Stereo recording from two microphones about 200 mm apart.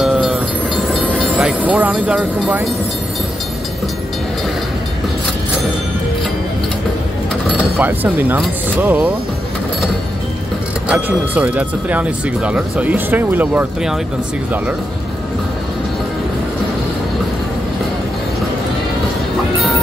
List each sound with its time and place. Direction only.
0.0 s train: centre (ahead or behind)
0.9 s speech: 5° right (ahead or behind)
7.8 s speech: 10° right (ahead or behind)
10.9 s speech: 10° right (ahead or behind)